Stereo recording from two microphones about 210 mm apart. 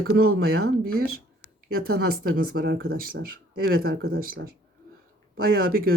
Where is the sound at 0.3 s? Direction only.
50° right (ahead or behind).